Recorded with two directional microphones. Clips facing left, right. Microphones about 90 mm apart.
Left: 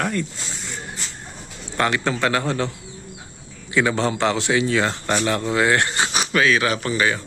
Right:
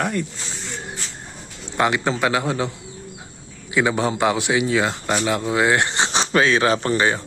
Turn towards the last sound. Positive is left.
turn(degrees=-30)  # may be behind; listen again after turning